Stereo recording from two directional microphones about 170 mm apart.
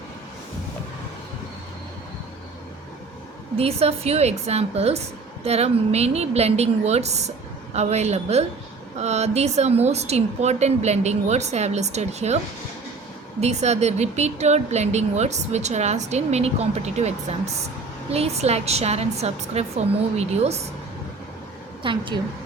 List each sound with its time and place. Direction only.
3.6 s a woman's voice: 35° right (ahead or behind)
13.4 s a woman's voice: 40° right (ahead or behind)
21.8 s a woman's voice: 30° right (ahead or behind)